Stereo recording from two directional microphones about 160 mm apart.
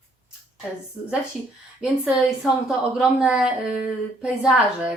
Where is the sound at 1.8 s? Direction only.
5° right (ahead or behind).